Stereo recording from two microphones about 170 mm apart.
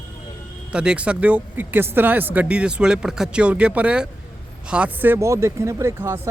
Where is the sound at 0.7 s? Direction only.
5° right (ahead or behind).